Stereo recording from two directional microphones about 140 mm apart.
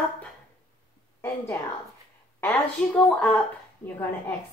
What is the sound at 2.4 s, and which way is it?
A woman's voice, 5° left (ahead or behind).